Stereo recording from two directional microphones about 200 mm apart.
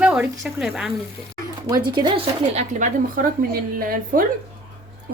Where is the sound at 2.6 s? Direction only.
40° right (ahead or behind).